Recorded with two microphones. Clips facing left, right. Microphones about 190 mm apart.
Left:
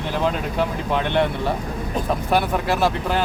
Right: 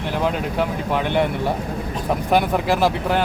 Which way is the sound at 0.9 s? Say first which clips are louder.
Even; 10° right (ahead or behind).